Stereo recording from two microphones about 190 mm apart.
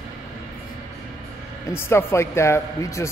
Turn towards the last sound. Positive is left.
turn(degrees=15)  # may be behind; listen again after turning